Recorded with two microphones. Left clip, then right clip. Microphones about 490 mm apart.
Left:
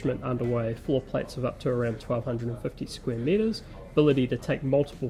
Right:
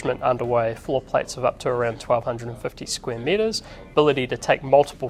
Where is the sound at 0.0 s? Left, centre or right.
Right.